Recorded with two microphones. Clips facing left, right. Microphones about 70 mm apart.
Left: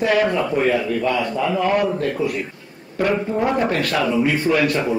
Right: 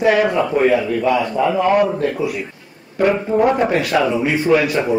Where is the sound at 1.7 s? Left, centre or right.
Centre.